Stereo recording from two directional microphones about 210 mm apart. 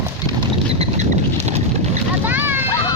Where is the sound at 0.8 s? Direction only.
30° right (ahead or behind).